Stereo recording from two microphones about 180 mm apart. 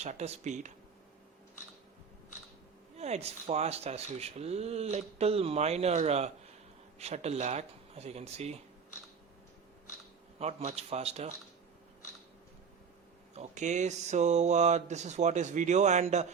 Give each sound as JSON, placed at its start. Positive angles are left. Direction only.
{"t": 0.0, "sound": "speech", "side_deg": -40}
{"t": 2.9, "sound": "speech", "side_deg": -35}
{"t": 10.3, "sound": "speech", "side_deg": -35}
{"t": 13.3, "sound": "speech", "side_deg": -40}